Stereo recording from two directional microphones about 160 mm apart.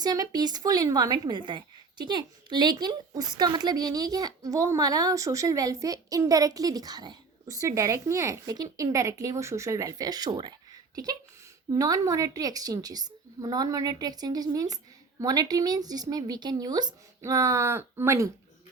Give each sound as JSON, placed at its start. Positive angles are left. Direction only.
{"t": 0.0, "sound": "a woman's voice", "side_deg": -25}